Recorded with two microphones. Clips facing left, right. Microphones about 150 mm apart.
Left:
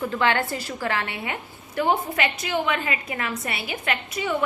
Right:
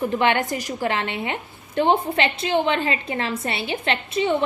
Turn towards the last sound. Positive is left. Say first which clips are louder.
# right 5 dB
turn(degrees=-25)  # may be behind; listen again after turning